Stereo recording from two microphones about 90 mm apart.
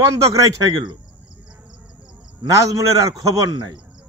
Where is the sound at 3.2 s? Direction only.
45° right (ahead or behind).